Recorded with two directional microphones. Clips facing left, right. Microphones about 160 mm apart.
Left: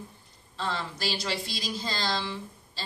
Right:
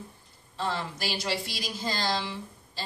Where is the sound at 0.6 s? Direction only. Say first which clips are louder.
Right 1 dB; 10° right (ahead or behind).